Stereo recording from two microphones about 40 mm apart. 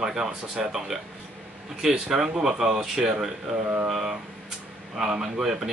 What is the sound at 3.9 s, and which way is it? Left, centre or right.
Speech, centre.